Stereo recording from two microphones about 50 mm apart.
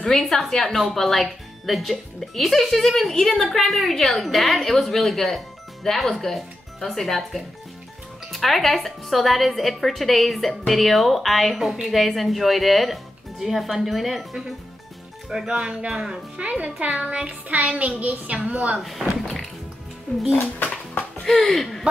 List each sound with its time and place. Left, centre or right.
0.0 s a woman's voice: centre
16.3 s a woman's voice: right
18.8 s speech: centre
20.6 s music: left
21.2 s speech: centre